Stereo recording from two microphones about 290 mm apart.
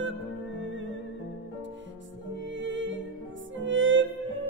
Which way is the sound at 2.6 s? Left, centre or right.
Right.